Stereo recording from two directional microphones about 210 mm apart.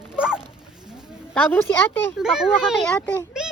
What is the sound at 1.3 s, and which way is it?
Speech, 10° left (ahead or behind).